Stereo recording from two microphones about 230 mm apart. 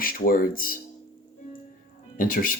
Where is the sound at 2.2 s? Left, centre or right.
Left.